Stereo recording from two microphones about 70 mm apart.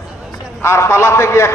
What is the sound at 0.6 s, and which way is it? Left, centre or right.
Speech, left.